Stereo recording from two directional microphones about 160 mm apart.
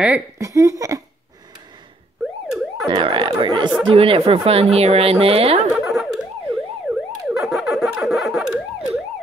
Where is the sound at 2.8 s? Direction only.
30° right (ahead or behind).